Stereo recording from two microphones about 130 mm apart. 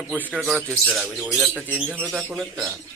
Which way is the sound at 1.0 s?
5° right (ahead or behind).